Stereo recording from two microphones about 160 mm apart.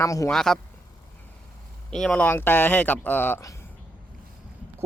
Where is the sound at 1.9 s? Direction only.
5° left (ahead or behind).